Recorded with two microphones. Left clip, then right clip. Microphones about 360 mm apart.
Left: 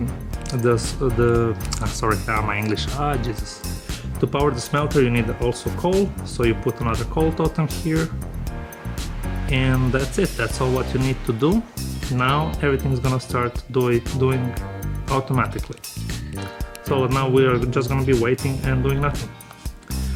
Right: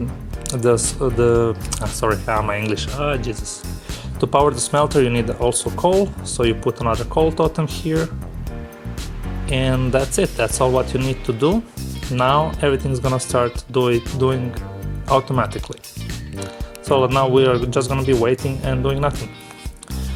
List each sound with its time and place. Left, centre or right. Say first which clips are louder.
0.4 s speech: right 4 dB; centre
9.5 s speech: right 3 dB; centre
12.2 s speech: right 5 dB; centre